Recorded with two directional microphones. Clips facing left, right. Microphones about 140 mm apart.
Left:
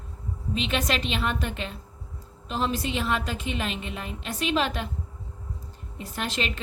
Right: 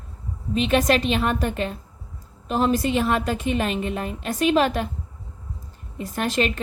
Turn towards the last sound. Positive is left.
turn(degrees=-50)  # may be behind; listen again after turning